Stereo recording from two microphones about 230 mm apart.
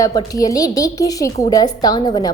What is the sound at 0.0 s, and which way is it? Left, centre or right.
A woman's voice, centre.